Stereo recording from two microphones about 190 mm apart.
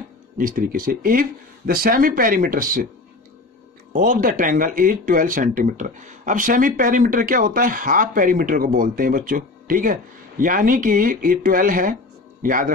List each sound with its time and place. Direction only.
0.4 s speech: 45° right (ahead or behind)
3.9 s speech: 45° right (ahead or behind)